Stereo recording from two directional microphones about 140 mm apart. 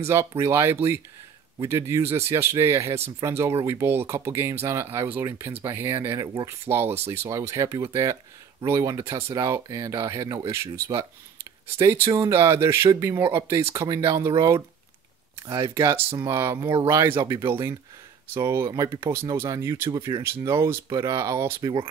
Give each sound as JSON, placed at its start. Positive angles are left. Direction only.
{"t": 0.0, "sound": "speech", "side_deg": -20}
{"t": 15.4, "sound": "speech", "side_deg": -25}